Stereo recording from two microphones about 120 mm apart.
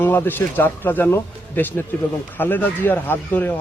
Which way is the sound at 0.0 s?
15° left (ahead or behind).